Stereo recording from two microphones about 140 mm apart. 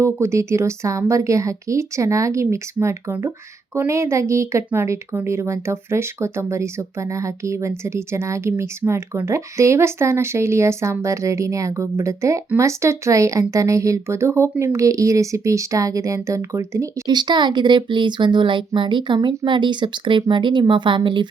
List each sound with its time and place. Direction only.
0.0 s speech: 20° right (ahead or behind); by 21.2 s 35° right (ahead or behind)